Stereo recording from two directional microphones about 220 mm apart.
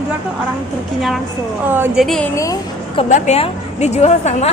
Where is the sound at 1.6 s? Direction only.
10° right (ahead or behind).